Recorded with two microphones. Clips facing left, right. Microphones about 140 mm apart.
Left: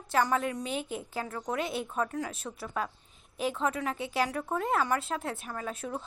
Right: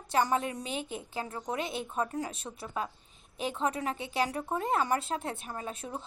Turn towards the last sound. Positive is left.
turn(degrees=-25)  # may be behind; listen again after turning